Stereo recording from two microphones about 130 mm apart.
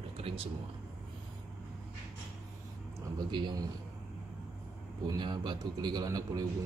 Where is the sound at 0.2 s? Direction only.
45° right (ahead or behind).